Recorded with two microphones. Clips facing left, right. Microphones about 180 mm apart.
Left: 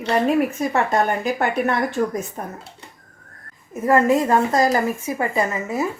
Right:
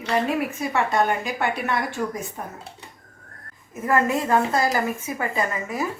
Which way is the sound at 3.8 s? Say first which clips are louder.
Left 5 dB; 30° left (ahead or behind).